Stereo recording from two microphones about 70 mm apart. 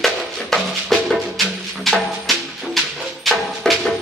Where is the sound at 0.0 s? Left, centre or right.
Centre.